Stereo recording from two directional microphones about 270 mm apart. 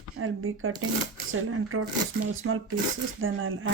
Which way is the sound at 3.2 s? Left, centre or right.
Right.